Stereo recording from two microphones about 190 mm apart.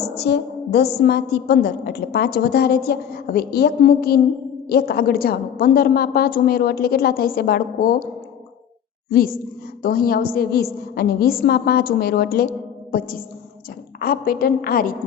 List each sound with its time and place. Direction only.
0.2 s a woman's voice: 60° left (ahead or behind)
9.8 s a woman's voice: 50° left (ahead or behind)